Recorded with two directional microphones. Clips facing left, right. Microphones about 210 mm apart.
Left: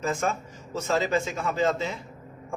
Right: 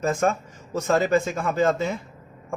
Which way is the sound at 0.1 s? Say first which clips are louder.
Right 5 dB; 50° right (ahead or behind).